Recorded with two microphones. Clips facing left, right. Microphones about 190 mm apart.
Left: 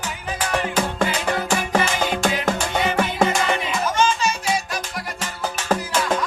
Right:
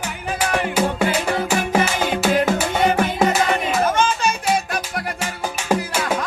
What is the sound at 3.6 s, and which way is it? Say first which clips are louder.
Music: right 2 dB; 55° right (ahead or behind).